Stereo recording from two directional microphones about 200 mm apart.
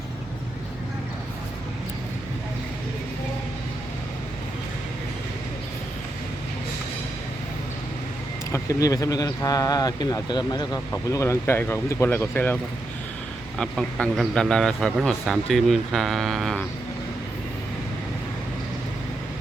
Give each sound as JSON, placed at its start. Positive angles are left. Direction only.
{"t": 8.5, "sound": "speech", "side_deg": 15}
{"t": 13.6, "sound": "speech", "side_deg": 0}